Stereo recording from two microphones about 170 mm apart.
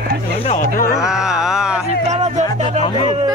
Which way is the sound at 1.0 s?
5° right (ahead or behind).